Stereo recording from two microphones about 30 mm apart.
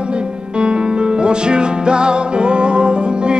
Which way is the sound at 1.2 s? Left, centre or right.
Right.